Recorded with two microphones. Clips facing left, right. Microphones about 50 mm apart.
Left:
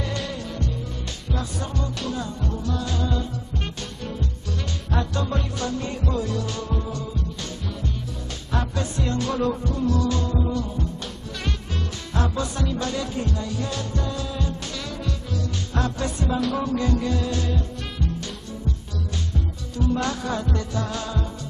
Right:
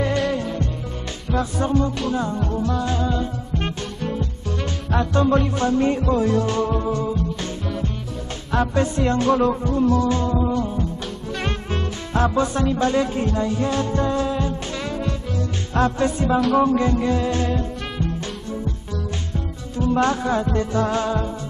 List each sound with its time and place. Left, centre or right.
0.4 s music: right
5.1 s music: right
8.7 s music: right
16.3 s music: centre
16.6 s music: right
19.8 s music: right